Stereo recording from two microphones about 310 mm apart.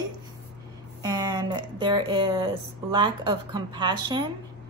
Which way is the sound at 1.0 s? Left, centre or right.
Centre.